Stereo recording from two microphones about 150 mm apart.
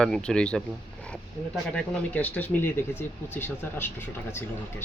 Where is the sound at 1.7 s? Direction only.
10° left (ahead or behind).